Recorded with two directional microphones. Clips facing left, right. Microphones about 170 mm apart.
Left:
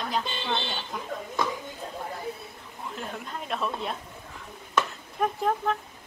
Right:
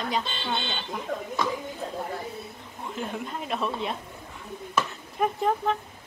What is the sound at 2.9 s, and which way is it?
Speech, centre (ahead or behind).